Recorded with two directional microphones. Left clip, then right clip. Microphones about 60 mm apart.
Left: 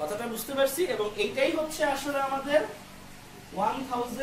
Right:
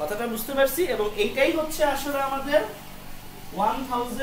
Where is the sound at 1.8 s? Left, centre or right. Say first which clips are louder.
Right 3 dB; centre.